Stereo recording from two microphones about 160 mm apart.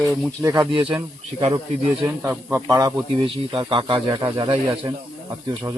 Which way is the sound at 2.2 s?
15° right (ahead or behind).